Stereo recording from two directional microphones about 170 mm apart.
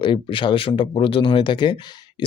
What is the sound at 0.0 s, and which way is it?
A man's voice, 30° left (ahead or behind).